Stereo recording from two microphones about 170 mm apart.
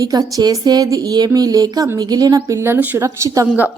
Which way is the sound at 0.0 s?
20° right (ahead or behind).